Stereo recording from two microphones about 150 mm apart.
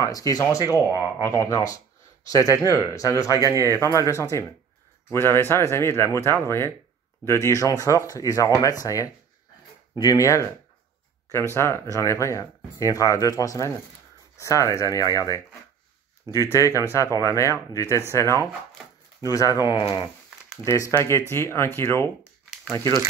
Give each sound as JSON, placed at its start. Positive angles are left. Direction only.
{"t": 0.0, "sound": "speech", "side_deg": 25}
{"t": 3.4, "sound": "a man's voice", "side_deg": -20}
{"t": 3.8, "sound": "speech", "side_deg": 20}
{"t": 16.5, "sound": "speech", "side_deg": 20}
{"t": 19.2, "sound": "speech", "side_deg": 25}